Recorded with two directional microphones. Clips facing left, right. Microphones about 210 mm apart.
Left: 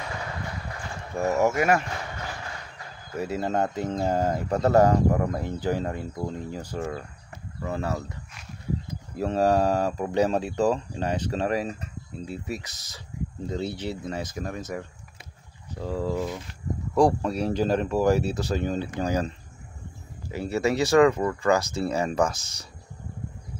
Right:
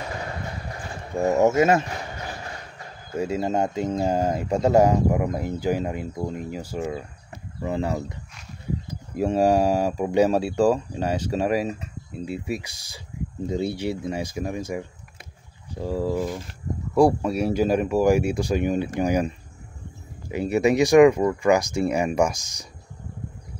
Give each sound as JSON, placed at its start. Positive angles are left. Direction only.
{"t": 0.7, "sound": "speech", "side_deg": -20}
{"t": 3.2, "sound": "speech", "side_deg": -15}